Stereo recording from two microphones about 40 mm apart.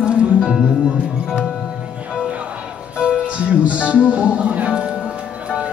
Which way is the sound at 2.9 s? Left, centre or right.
Right.